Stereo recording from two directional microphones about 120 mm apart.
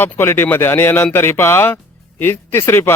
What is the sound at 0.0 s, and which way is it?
Speech, 20° left (ahead or behind).